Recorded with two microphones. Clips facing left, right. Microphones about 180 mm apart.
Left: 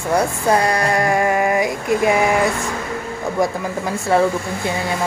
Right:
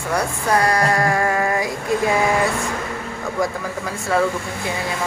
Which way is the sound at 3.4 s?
25° left (ahead or behind).